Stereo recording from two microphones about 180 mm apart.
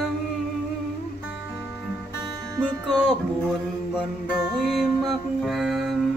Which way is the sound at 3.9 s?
5° right (ahead or behind).